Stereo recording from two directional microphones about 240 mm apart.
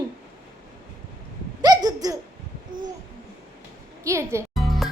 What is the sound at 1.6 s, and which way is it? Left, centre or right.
Speech, centre.